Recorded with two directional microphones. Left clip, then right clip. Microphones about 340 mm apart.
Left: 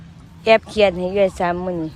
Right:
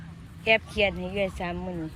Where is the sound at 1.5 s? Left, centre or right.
Left.